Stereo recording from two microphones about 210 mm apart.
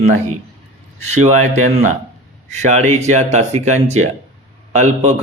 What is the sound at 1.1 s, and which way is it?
A man's voice, 35° right (ahead or behind).